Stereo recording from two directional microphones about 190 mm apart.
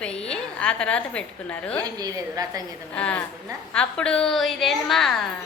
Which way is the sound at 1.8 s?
20° right (ahead or behind).